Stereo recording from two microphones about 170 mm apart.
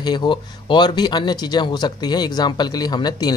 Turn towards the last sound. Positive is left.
turn(degrees=25)  # may be behind; listen again after turning